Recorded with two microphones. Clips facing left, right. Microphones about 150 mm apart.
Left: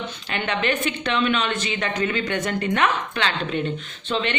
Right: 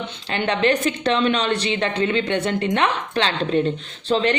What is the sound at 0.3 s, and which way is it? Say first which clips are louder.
A woman's voice: right 5 dB; 30° right (ahead or behind).